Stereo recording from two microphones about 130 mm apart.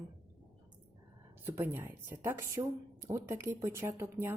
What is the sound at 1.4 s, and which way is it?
A woman's voice, 20° right (ahead or behind).